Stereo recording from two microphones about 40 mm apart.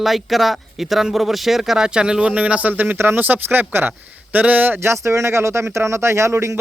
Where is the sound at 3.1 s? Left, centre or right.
Right.